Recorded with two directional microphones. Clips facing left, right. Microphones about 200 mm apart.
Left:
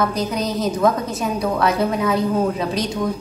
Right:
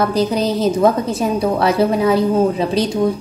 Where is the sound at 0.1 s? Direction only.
30° right (ahead or behind).